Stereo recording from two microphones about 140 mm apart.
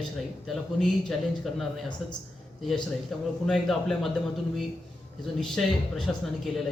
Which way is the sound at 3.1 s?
Centre (ahead or behind).